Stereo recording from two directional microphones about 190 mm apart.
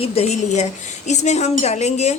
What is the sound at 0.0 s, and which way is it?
A woman's voice, 30° left (ahead or behind).